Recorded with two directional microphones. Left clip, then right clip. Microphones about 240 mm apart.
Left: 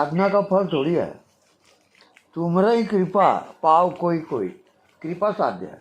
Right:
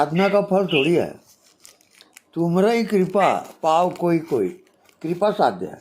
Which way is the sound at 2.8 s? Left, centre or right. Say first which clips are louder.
Right 2 dB; centre.